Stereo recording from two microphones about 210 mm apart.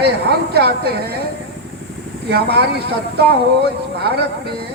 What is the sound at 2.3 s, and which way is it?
Speech, 50° right (ahead or behind).